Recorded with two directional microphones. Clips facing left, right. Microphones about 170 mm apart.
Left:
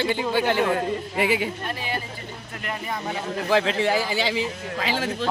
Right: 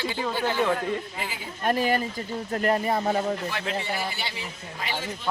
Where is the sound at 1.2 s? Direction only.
75° left (ahead or behind).